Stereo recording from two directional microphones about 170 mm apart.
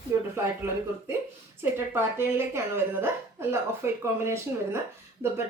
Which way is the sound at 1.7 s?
15° right (ahead or behind).